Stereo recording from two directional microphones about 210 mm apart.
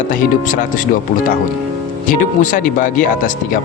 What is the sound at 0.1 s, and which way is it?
Speech, 40° left (ahead or behind).